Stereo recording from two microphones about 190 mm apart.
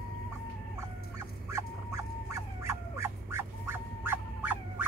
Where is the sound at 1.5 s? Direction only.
15° right (ahead or behind).